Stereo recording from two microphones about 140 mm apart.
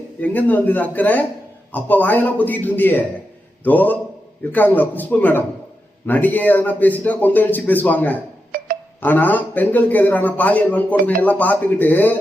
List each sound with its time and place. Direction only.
0.2 s a man's voice: 10° left (ahead or behind)
8.5 s music: 90° right
9.0 s a man's voice: 10° left (ahead or behind)